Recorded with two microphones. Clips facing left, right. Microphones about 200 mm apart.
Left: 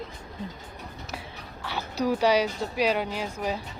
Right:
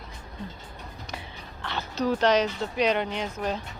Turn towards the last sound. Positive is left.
turn(degrees=10)  # may be behind; listen again after turning